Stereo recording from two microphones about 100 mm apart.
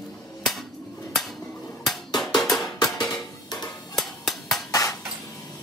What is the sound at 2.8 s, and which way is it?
Music, 45° left (ahead or behind).